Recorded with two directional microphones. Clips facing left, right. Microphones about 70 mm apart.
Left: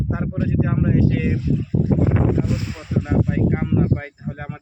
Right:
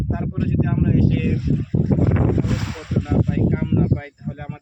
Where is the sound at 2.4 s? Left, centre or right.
Right.